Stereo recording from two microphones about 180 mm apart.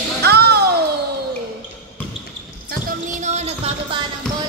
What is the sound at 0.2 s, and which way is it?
Music, 65° right (ahead or behind).